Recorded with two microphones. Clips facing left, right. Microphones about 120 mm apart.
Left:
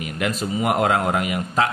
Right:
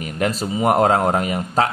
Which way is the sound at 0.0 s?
35° right (ahead or behind).